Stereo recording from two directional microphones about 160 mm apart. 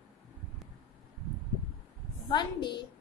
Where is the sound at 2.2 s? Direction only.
30° left (ahead or behind).